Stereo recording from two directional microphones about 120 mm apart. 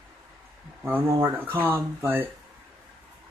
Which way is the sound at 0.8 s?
20° right (ahead or behind).